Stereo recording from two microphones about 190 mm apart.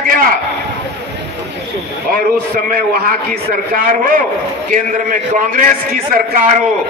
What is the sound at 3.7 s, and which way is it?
A man's voice, 50° right (ahead or behind).